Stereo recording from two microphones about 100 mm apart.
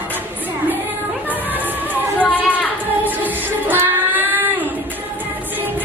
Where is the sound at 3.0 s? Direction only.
20° right (ahead or behind).